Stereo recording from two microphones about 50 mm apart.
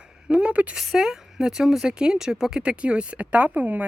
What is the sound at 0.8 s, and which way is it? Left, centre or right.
Speech, centre.